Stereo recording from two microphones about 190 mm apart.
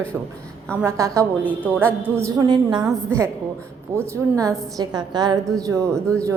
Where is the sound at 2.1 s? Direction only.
15° right (ahead or behind).